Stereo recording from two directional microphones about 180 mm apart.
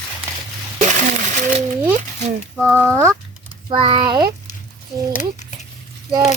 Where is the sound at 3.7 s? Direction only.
25° right (ahead or behind).